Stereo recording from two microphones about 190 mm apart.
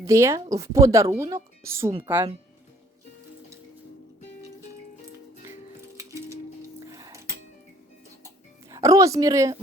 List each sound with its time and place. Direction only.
0.0 s speech: 15° right (ahead or behind)
6.9 s music: 15° right (ahead or behind)
8.7 s speech: 15° right (ahead or behind)